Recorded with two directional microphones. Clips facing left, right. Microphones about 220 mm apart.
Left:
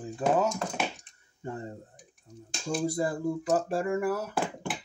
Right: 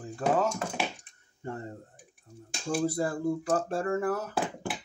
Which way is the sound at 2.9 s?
15° left (ahead or behind).